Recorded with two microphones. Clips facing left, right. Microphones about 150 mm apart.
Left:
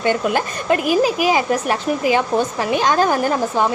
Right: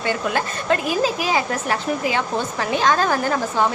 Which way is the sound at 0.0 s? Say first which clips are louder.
Left 4 dB; 20° left (ahead or behind).